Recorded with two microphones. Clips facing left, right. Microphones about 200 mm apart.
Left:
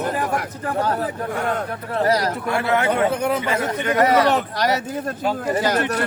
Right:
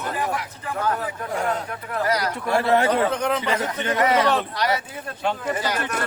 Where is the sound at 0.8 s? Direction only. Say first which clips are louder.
Left 3 dB; 35° left (ahead or behind).